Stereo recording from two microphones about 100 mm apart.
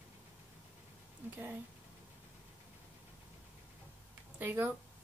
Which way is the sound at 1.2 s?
20° right (ahead or behind).